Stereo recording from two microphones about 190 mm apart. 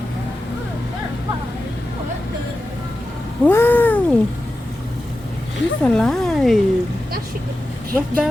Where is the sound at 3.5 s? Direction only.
10° left (ahead or behind).